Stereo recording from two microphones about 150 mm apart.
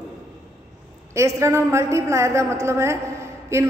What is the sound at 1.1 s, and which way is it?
A woman's voice, 20° right (ahead or behind).